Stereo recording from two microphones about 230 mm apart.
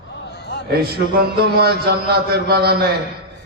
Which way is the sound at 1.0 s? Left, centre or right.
Right.